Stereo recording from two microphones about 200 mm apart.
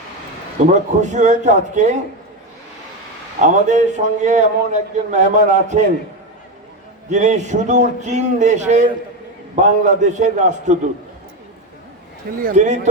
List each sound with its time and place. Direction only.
0.7 s a man's voice: 35° right (ahead or behind)
3.4 s a man's voice: 40° right (ahead or behind)
7.1 s a man's voice: 35° right (ahead or behind)
12.4 s a man's voice: 40° right (ahead or behind)